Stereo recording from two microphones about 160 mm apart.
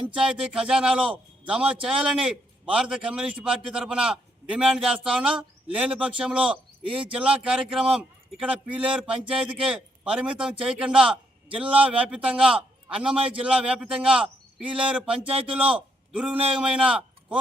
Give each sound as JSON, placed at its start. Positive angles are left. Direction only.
{"t": 0.1, "sound": "a man's voice", "side_deg": -5}
{"t": 15.3, "sound": "a man's voice", "side_deg": -35}
{"t": 15.5, "sound": "a man's voice", "side_deg": -5}